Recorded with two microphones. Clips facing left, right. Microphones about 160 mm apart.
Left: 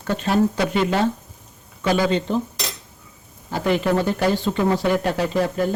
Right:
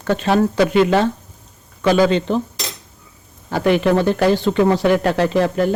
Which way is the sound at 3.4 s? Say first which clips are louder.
Right 5 dB; 70° right (ahead or behind).